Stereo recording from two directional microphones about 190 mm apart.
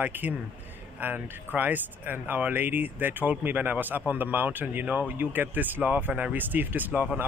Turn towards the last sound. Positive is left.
turn(degrees=-10)  # may be behind; listen again after turning